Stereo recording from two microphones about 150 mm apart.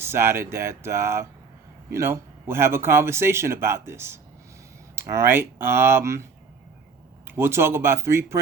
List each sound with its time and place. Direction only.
0.0 s a man's voice: 15° right (ahead or behind)
7.3 s a man's voice: 15° right (ahead or behind)